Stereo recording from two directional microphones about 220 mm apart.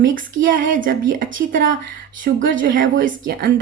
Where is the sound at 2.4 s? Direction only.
40° right (ahead or behind).